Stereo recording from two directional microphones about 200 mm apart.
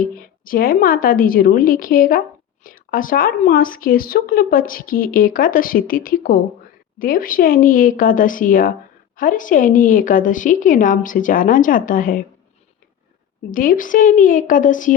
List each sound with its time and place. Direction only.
0.0 s a woman's voice: 45° left (ahead or behind)
13.5 s a woman's voice: 40° left (ahead or behind)